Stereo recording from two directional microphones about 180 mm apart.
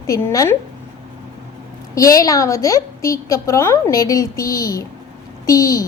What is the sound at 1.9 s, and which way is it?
A woman's voice, 20° left (ahead or behind).